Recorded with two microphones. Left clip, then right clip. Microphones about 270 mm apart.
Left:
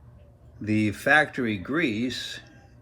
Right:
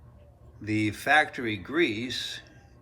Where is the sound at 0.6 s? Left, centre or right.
Centre.